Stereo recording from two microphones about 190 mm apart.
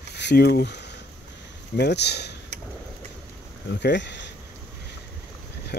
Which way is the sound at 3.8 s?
65° left (ahead or behind).